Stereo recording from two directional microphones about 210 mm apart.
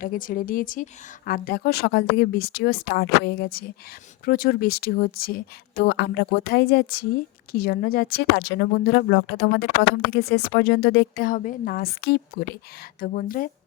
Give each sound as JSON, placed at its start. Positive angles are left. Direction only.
{"t": 0.0, "sound": "a woman's voice", "side_deg": 40}